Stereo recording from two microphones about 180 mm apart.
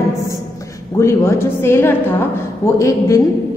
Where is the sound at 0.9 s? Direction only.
15° left (ahead or behind).